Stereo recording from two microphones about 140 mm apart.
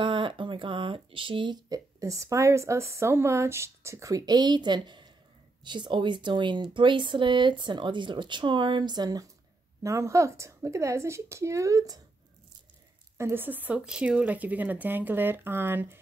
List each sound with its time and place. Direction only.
0.0 s speech: 35° right (ahead or behind)
13.2 s speech: 15° right (ahead or behind)